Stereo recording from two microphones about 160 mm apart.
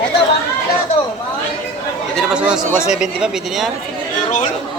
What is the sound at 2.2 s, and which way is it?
A man's voice, 5° right (ahead or behind).